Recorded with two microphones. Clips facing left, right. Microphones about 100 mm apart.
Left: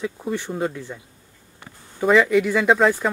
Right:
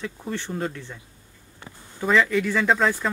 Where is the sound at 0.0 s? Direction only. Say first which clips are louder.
Left 5 dB; 10° left (ahead or behind).